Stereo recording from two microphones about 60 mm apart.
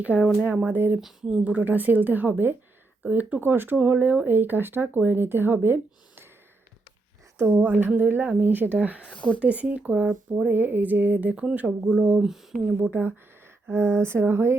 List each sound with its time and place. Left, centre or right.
0.1 s speech: left
0.4 s a woman's voice: right
7.3 s speech: right
9.0 s speech: left
9.4 s a woman's voice: right
10.5 s a woman's voice: right; by 12.2 s centre
12.2 s speech: centre
12.8 s speech: right